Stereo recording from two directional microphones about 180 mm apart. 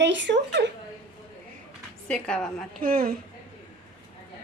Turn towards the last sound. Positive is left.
turn(degrees=-55)  # may be behind; listen again after turning